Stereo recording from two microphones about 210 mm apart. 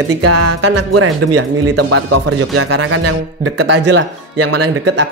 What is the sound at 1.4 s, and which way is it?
Speech, 90° right.